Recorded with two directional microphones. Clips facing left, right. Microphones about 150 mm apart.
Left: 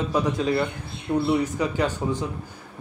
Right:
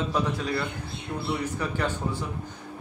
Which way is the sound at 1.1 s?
15° left (ahead or behind).